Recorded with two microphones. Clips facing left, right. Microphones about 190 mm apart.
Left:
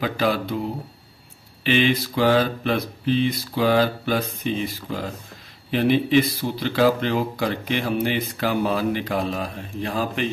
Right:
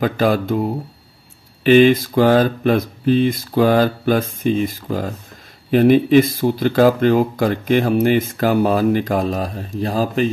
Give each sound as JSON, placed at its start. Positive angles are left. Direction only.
{"t": 0.0, "sound": "speech", "side_deg": -45}